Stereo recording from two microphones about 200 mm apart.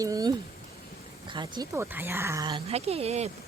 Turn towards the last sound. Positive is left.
turn(degrees=-30)  # may be behind; listen again after turning